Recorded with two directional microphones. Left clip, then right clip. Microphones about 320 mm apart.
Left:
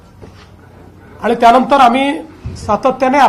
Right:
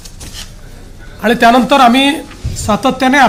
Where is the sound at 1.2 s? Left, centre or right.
Right.